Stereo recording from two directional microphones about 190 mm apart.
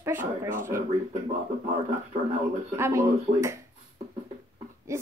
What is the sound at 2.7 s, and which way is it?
Speech, 15° right (ahead or behind).